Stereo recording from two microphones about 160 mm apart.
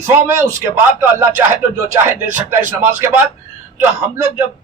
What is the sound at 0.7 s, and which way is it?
Speech, 15° right (ahead or behind).